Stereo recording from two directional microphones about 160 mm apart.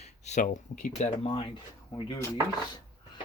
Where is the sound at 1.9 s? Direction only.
30° left (ahead or behind).